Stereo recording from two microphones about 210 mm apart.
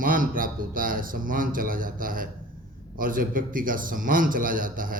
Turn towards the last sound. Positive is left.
turn(degrees=-40)  # may be behind; listen again after turning